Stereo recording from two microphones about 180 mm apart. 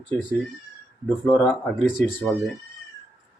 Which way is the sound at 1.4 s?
Centre (ahead or behind).